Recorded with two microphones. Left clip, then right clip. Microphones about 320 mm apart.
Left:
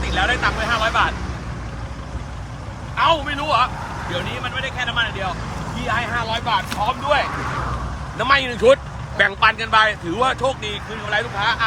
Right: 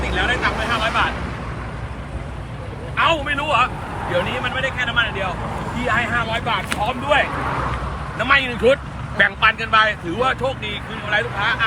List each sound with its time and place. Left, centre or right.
0.0 s vehicle: left
2.9 s a man's voice: centre